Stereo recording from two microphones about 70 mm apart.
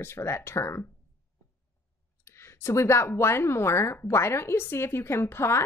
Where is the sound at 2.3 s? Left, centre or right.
Left.